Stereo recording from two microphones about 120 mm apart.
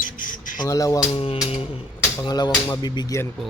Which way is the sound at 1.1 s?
50° left (ahead or behind).